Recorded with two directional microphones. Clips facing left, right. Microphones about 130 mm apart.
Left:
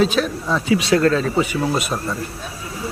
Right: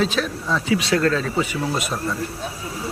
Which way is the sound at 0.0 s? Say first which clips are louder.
Left 4 dB; 15° left (ahead or behind).